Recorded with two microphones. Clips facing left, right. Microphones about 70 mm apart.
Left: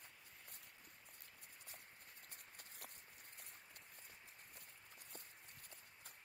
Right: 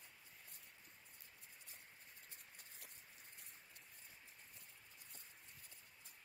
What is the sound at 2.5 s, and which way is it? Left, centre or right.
Patter, left.